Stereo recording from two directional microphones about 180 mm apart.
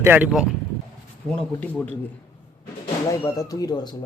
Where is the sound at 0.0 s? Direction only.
10° right (ahead or behind).